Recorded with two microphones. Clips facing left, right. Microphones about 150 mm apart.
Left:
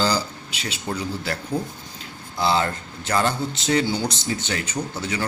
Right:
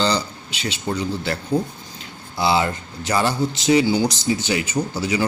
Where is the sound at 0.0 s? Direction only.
5° left (ahead or behind).